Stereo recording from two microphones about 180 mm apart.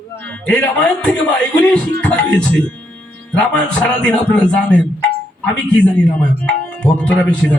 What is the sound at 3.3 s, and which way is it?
Speech, 5° left (ahead or behind).